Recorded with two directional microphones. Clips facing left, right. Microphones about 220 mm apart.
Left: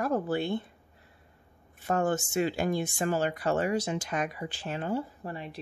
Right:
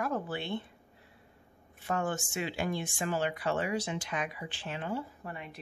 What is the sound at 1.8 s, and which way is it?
Speech, 40° left (ahead or behind).